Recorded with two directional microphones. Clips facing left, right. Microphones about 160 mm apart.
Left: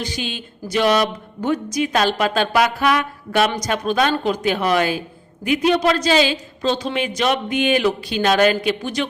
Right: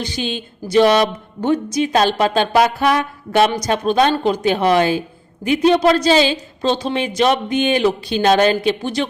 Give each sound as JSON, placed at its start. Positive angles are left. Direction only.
{"t": 0.0, "sound": "speech", "side_deg": -30}